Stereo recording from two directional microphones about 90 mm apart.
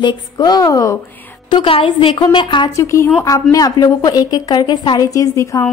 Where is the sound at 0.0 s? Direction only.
50° left (ahead or behind).